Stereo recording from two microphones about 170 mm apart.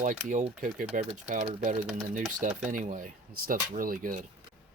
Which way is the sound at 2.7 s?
50° right (ahead or behind).